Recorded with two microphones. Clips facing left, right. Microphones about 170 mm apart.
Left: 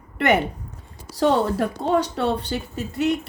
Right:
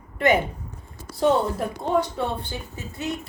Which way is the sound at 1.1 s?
90° left.